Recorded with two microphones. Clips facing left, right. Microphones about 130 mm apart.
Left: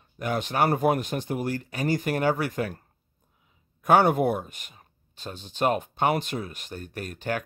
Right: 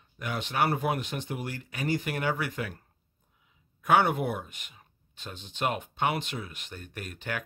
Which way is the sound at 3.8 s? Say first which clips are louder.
Left 4 dB; 40° left (ahead or behind).